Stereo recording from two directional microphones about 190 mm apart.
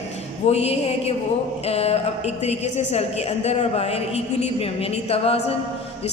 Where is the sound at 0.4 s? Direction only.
35° left (ahead or behind).